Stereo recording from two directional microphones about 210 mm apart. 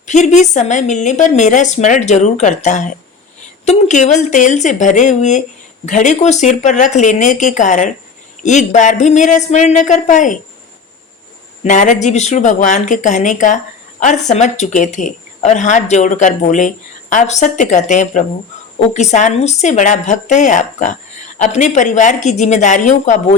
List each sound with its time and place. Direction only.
0.0 s a woman's voice: 35° left (ahead or behind)
11.6 s a woman's voice: 35° left (ahead or behind)